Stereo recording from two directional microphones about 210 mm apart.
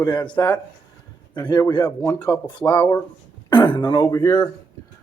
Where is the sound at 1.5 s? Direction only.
20° left (ahead or behind).